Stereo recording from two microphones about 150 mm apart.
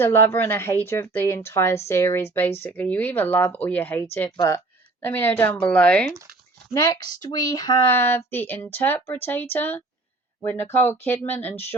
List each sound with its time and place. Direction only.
0.0 s a woman's voice: 15° left (ahead or behind)
6.7 s speech: 25° left (ahead or behind)
7.8 s a woman's voice: 15° left (ahead or behind)